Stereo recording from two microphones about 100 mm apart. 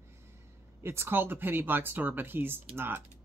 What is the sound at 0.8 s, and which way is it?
Speech, 25° right (ahead or behind).